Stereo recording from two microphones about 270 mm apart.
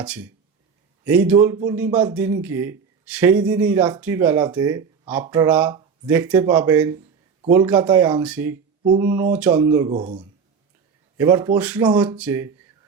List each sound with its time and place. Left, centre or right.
0.0 s a man's voice: centre
11.2 s a man's voice: centre